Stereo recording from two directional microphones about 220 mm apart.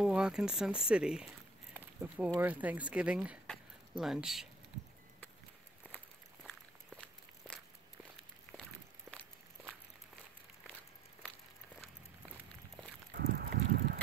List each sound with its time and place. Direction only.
0.0 s speech: 5° right (ahead or behind)
5.9 s walk: centre (ahead or behind)
13.1 s a sound: 45° right (ahead or behind)